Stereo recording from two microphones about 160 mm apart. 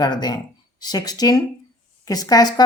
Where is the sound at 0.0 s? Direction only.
25° left (ahead or behind).